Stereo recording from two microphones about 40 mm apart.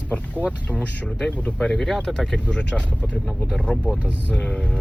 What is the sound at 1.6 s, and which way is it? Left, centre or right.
Speech, centre.